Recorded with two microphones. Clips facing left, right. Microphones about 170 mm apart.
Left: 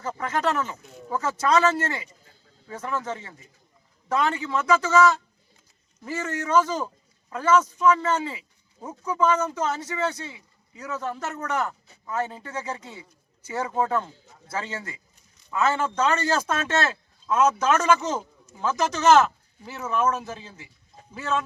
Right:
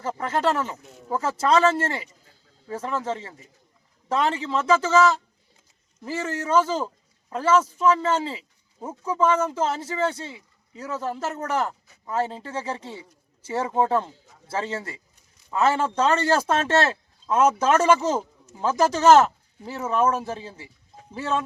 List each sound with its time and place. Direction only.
0.0 s speech: 30° right (ahead or behind)